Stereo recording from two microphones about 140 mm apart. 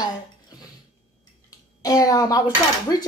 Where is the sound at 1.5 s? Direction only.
25° left (ahead or behind).